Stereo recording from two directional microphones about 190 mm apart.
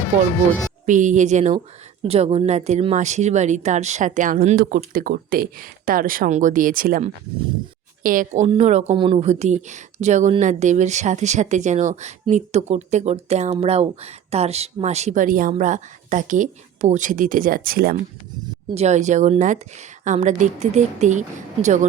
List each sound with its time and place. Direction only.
0.9 s speech: 40° right (ahead or behind)
18.7 s speech: 35° right (ahead or behind)